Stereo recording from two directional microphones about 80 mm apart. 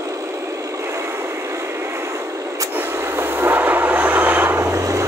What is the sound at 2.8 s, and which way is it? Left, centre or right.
Train, right.